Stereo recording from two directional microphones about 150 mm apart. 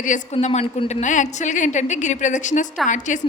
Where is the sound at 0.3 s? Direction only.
45° left (ahead or behind).